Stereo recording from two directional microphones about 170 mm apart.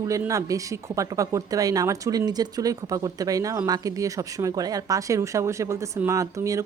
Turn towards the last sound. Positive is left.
turn(degrees=-20)  # may be behind; listen again after turning